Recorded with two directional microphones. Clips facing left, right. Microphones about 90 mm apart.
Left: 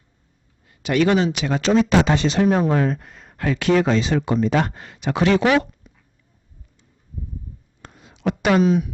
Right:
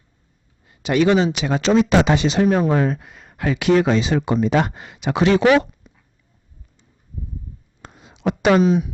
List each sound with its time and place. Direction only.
0.6 s speech: 20° right (ahead or behind)
2.5 s speech: 5° right (ahead or behind); by 5.9 s 20° right (ahead or behind)
7.8 s a sound: 20° right (ahead or behind)